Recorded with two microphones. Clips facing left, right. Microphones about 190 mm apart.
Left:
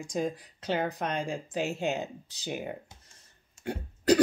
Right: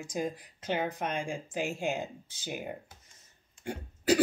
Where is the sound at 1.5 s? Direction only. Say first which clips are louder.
Left 2 dB; 65° left (ahead or behind).